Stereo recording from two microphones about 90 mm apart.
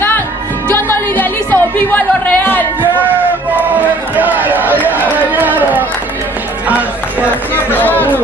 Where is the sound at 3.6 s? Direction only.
20° right (ahead or behind).